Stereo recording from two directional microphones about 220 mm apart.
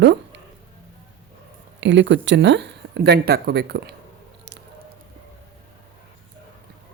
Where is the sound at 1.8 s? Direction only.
55° right (ahead or behind).